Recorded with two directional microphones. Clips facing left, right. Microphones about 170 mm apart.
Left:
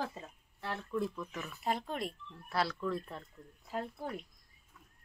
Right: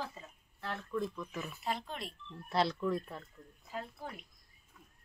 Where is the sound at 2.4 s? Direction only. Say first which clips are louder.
Right 2 dB; 20° right (ahead or behind).